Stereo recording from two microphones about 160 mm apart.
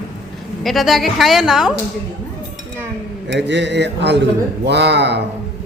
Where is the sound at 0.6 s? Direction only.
Centre (ahead or behind).